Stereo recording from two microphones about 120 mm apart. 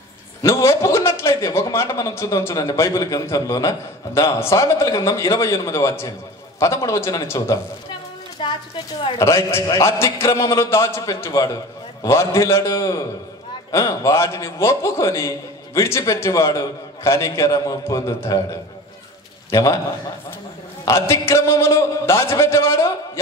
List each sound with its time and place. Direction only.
0.4 s a man's voice: 25° left (ahead or behind)
8.4 s a sound: 45° left (ahead or behind)
9.2 s a man's voice: 25° left (ahead or behind)
20.8 s a man's voice: 25° left (ahead or behind)